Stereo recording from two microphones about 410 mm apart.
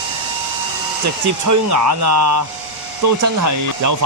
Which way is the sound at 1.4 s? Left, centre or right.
Right.